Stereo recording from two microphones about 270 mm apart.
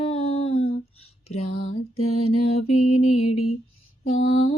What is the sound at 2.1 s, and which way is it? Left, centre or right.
Mantra, left.